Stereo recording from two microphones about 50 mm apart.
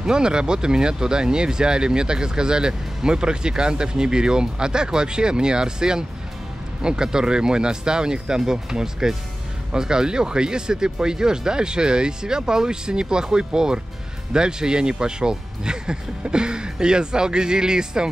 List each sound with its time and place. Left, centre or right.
0.0 s speech: centre